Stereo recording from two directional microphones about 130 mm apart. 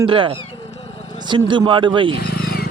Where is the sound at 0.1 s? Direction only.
45° right (ahead or behind).